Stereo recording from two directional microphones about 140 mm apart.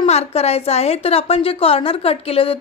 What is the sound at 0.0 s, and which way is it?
Speech, 50° left (ahead or behind).